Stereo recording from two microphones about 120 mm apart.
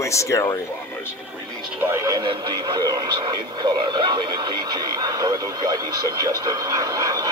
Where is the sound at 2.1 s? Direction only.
35° right (ahead or behind).